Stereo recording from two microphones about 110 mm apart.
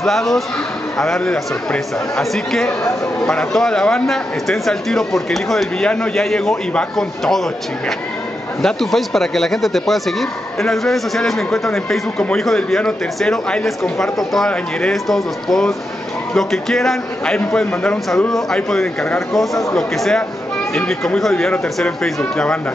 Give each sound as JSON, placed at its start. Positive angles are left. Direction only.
{"t": 0.0, "sound": "speech", "side_deg": 5}
{"t": 8.6, "sound": "speech", "side_deg": 0}